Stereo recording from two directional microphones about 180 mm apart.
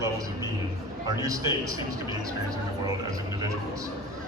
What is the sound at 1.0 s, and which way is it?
Speech, 20° right (ahead or behind).